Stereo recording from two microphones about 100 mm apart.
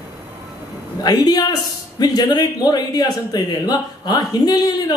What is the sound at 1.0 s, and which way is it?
A man's voice, 40° left (ahead or behind).